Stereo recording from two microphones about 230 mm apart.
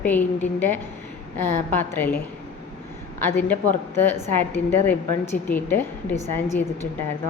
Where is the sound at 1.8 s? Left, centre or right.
Centre.